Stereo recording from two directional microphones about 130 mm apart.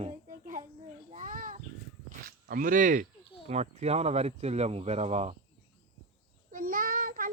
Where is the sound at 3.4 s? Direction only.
55° right (ahead or behind).